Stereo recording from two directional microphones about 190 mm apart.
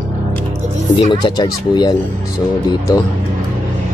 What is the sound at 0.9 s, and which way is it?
Speech, 20° left (ahead or behind).